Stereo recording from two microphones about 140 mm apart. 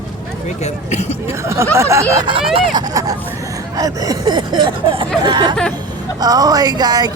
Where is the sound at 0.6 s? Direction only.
50° left (ahead or behind).